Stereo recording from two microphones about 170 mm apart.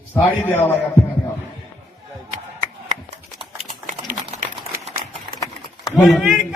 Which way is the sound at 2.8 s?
40° right (ahead or behind).